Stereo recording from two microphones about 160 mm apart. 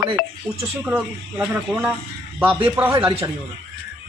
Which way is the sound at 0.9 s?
10° right (ahead or behind).